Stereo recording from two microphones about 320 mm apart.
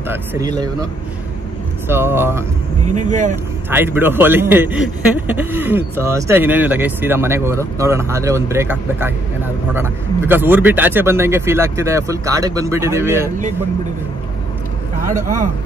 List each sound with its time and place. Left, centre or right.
0.1 s speech: centre
1.9 s speech: centre
2.9 s speech: right
3.7 s speech: centre
15.0 s speech: right